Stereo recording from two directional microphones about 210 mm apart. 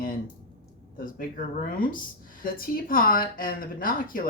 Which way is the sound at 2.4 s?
45° left (ahead or behind).